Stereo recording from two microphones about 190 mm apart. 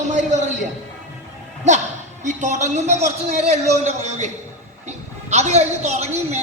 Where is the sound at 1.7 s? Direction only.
40° right (ahead or behind).